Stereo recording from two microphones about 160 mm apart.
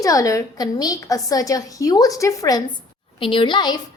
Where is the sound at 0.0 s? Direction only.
20° left (ahead or behind).